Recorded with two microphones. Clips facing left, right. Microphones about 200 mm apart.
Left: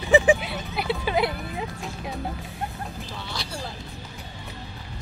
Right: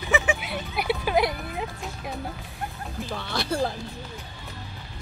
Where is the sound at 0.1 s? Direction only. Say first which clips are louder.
Left 8 dB; 30° left (ahead or behind).